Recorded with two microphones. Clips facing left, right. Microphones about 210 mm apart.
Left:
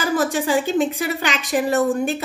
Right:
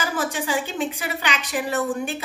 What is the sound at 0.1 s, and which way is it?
A woman's voice, 45° left (ahead or behind).